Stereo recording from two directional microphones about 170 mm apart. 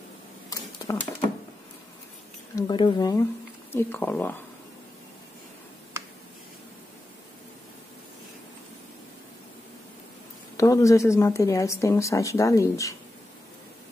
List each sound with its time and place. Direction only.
0.5 s a sound: 20° left (ahead or behind)
2.5 s speech: 25° left (ahead or behind)
10.6 s speech: 20° left (ahead or behind)